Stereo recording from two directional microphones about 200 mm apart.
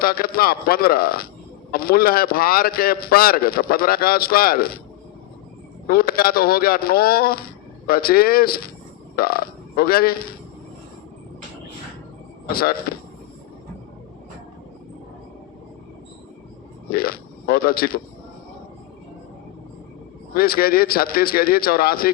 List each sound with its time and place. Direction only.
0.0 s a man's voice: 50° left (ahead or behind)
5.9 s a man's voice: 50° left (ahead or behind)
12.9 s a sound: 50° left (ahead or behind)
16.9 s a man's voice: 50° left (ahead or behind)
20.3 s a man's voice: 50° left (ahead or behind)